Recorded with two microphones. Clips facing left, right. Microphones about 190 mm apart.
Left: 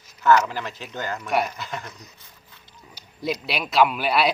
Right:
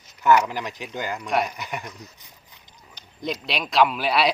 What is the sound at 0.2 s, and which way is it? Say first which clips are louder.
Speech: even; 15° right (ahead or behind).